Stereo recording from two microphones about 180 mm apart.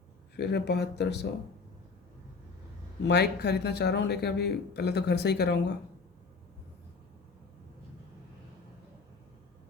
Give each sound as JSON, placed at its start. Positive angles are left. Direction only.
{"t": 0.3, "sound": "speech", "side_deg": 65}
{"t": 3.1, "sound": "speech", "side_deg": 65}